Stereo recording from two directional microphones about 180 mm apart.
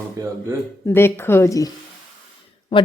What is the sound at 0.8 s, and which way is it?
Speech, 15° left (ahead or behind).